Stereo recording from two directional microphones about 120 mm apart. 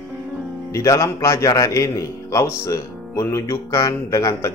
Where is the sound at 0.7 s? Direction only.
25° left (ahead or behind).